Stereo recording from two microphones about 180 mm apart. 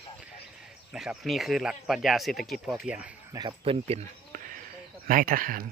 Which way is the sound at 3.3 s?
30° right (ahead or behind).